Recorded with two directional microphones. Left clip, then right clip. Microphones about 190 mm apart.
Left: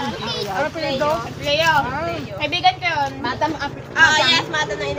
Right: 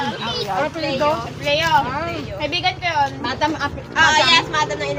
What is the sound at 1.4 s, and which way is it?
Speech, 20° left (ahead or behind).